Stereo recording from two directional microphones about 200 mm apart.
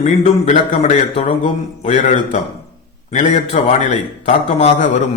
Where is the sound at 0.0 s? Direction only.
35° left (ahead or behind).